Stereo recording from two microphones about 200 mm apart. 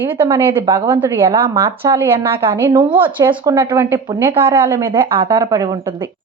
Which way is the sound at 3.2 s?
20° right (ahead or behind).